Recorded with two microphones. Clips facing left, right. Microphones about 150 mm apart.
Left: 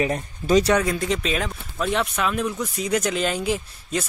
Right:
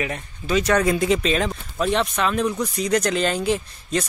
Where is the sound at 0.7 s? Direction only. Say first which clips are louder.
Right 2 dB; 5° right (ahead or behind).